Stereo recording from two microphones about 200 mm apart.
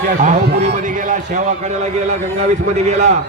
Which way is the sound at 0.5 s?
35° right (ahead or behind).